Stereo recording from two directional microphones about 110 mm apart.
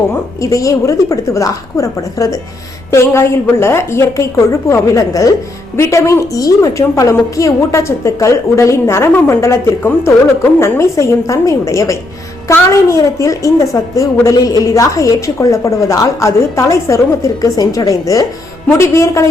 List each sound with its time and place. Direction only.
0.4 s a woman's voice: 30° left (ahead or behind)